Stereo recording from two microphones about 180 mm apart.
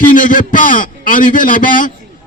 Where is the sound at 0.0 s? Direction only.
45° left (ahead or behind).